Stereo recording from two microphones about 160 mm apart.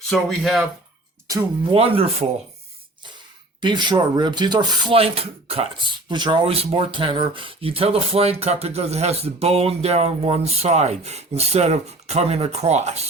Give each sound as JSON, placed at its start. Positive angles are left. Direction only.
{"t": 0.1, "sound": "speech", "side_deg": 0}
{"t": 1.7, "sound": "speech", "side_deg": -35}
{"t": 3.6, "sound": "speech", "side_deg": -30}
{"t": 4.9, "sound": "speech", "side_deg": -40}